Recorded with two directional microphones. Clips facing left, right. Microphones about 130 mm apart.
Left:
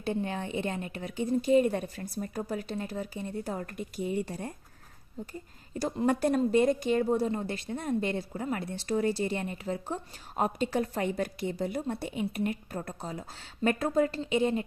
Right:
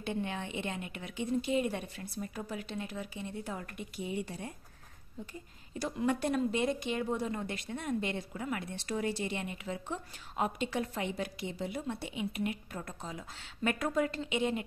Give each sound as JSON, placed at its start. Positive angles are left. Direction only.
{"t": 0.0, "sound": "speech", "side_deg": 35}
{"t": 5.8, "sound": "speech", "side_deg": 35}